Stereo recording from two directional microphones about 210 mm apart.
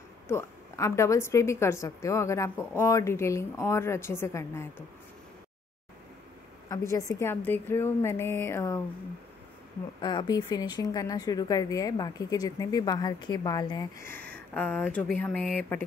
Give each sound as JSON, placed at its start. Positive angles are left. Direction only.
{"t": 0.3, "sound": "speech", "side_deg": 15}
{"t": 6.7, "sound": "speech", "side_deg": 15}
{"t": 9.9, "sound": "speech", "side_deg": 20}